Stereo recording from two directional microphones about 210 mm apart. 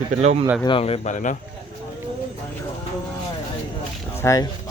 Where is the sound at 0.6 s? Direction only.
25° left (ahead or behind).